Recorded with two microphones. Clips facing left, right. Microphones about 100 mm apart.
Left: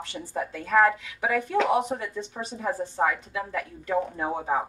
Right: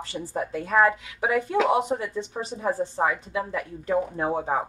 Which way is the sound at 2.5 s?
30° right (ahead or behind).